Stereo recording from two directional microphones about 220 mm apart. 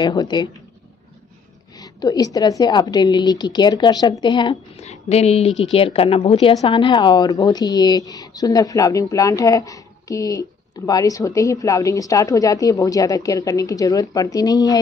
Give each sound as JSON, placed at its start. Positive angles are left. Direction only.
{"t": 0.0, "sound": "a woman's voice", "side_deg": 20}
{"t": 1.8, "sound": "a woman's voice", "side_deg": 15}